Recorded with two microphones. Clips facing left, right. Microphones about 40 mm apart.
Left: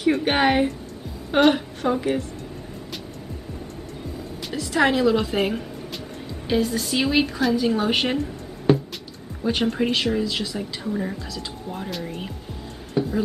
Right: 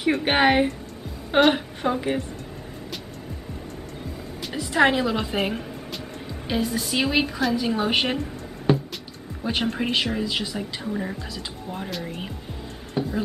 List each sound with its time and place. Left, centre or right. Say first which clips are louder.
0.0 s speech: even; centre
4.6 s a woman's voice: even; centre